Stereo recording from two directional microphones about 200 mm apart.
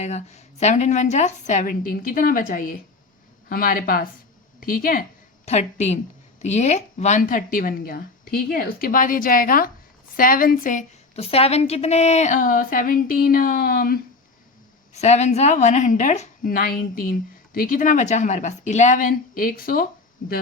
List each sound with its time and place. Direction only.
0.0 s a woman's voice: 35° left (ahead or behind)
5.5 s a woman's voice: 35° left (ahead or behind)
14.9 s a woman's voice: 35° left (ahead or behind)